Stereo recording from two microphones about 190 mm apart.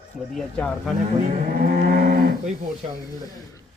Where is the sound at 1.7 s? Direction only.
45° right (ahead or behind).